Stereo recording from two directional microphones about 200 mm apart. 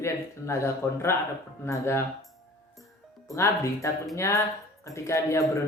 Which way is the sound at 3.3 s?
15° left (ahead or behind).